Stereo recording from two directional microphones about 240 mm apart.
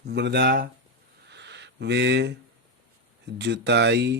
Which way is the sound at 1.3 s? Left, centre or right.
Right.